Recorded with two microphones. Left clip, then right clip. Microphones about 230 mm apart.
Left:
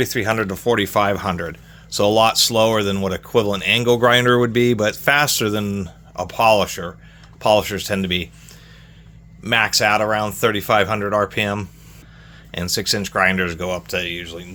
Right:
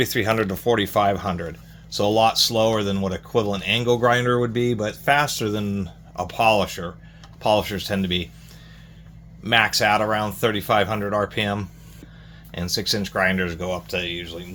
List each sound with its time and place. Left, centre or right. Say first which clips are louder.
0.0 s speech: left 1 dB; centre; by 5.9 s left
6.1 s speech: left 4 dB; left
9.4 s speech: left 2 dB; left